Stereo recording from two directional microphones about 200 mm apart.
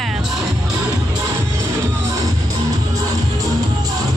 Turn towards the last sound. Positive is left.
turn(degrees=-20)  # may be behind; listen again after turning